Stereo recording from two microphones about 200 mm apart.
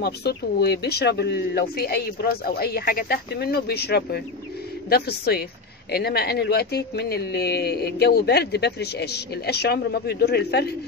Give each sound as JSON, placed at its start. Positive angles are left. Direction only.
{"t": 0.0, "sound": "speech", "side_deg": 55}